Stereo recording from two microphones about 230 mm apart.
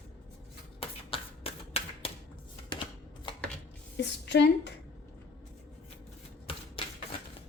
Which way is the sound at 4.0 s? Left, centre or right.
Left.